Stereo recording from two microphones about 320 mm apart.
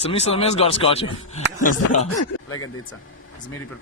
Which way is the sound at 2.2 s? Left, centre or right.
Left.